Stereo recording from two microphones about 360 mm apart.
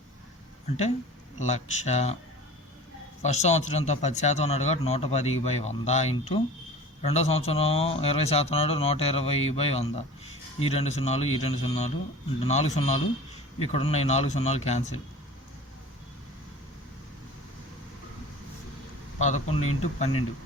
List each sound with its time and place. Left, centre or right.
1.4 s speech: centre
3.2 s speech: centre
19.2 s speech: centre